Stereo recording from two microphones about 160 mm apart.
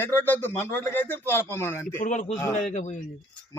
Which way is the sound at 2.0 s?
50° left (ahead or behind).